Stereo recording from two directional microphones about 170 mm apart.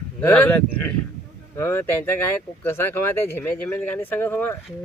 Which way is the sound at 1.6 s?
15° left (ahead or behind).